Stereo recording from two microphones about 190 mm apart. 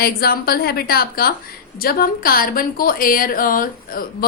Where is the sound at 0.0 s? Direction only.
55° left (ahead or behind).